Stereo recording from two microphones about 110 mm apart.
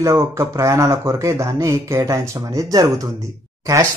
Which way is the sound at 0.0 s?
25° right (ahead or behind).